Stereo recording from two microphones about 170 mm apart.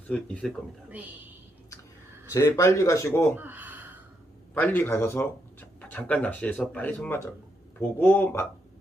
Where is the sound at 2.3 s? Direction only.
15° left (ahead or behind).